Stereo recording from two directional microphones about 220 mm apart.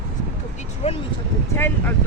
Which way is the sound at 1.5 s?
10° left (ahead or behind).